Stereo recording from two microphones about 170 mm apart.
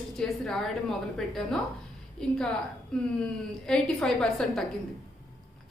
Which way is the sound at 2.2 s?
5° left (ahead or behind).